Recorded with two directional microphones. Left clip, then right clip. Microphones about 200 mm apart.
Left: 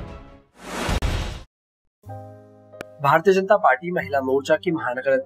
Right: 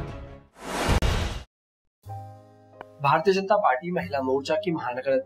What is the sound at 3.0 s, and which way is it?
Speech, 15° left (ahead or behind).